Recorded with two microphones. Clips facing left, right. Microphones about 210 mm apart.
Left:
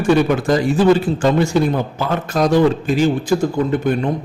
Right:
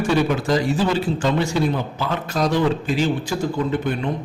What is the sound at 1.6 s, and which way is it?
Speech, 50° left (ahead or behind).